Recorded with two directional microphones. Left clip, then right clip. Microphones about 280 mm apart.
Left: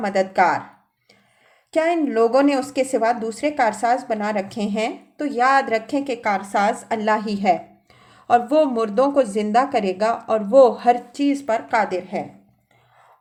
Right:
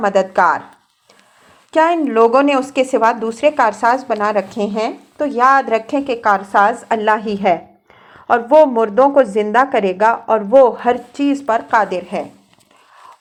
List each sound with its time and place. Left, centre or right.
0.0 s a woman's voice: centre
1.7 s a woman's voice: centre